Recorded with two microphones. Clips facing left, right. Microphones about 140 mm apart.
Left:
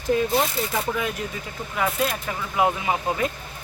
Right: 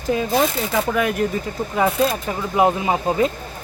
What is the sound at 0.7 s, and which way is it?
Speech, 70° right (ahead or behind).